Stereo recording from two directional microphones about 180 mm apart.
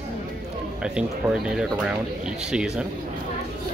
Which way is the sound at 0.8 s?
5° right (ahead or behind).